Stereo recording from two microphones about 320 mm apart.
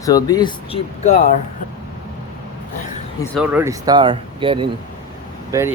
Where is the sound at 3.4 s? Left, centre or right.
Centre.